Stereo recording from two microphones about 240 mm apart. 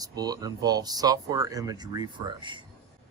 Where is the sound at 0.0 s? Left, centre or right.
Centre.